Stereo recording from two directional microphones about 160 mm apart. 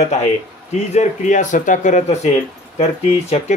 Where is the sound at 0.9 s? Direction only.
50° left (ahead or behind).